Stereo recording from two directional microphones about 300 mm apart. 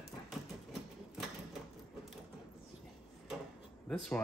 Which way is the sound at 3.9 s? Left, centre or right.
Centre.